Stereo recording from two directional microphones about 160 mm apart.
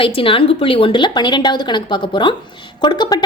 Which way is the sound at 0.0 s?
35° left (ahead or behind).